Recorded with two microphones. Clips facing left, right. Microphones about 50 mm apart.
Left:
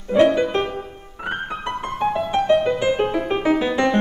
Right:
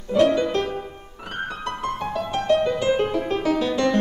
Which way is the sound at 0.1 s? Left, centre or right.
Left.